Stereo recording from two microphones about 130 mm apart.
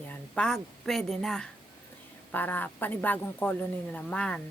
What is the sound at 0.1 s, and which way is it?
Speech, 5° left (ahead or behind).